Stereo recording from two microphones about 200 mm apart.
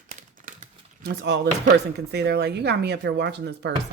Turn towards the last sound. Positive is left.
turn(degrees=-60)  # may be behind; listen again after turning